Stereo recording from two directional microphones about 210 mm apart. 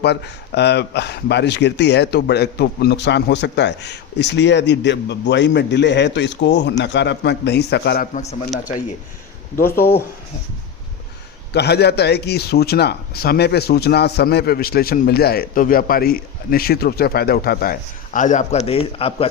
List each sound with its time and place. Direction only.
0.0 s speech: 50° left (ahead or behind)
8.1 s a man's voice: 30° left (ahead or behind)
9.6 s speech: 10° left (ahead or behind)
11.5 s a man's voice: 50° left (ahead or behind); by 19.3 s 25° left (ahead or behind)